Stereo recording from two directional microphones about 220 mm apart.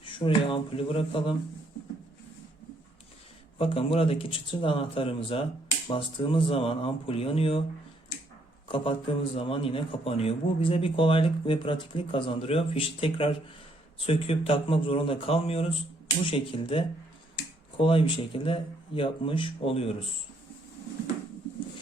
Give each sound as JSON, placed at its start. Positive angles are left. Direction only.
{"t": 0.0, "sound": "a man's voice", "side_deg": 25}
{"t": 3.6, "sound": "a man's voice", "side_deg": 25}
{"t": 8.6, "sound": "a man's voice", "side_deg": 25}